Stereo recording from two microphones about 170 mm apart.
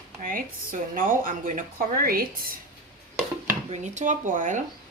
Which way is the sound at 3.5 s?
45° right (ahead or behind).